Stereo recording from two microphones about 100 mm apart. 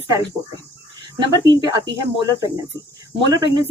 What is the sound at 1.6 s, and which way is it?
Speech, 45° right (ahead or behind).